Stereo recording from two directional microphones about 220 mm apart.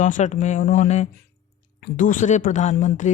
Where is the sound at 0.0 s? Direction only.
35° left (ahead or behind).